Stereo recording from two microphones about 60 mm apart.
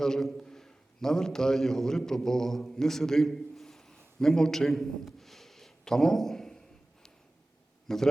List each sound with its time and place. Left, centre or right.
0.0 s a man's voice: centre
7.9 s a man's voice: centre